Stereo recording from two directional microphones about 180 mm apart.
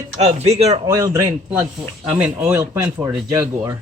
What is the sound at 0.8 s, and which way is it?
Speech, 20° right (ahead or behind).